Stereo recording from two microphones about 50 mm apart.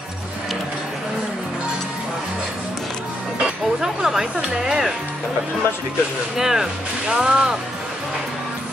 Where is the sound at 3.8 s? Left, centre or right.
Centre.